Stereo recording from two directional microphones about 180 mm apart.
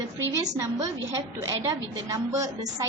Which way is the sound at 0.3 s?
20° right (ahead or behind).